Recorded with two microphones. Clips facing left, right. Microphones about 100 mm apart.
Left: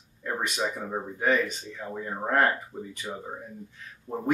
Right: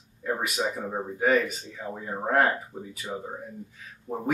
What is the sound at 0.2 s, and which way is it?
Speech, 5° right (ahead or behind).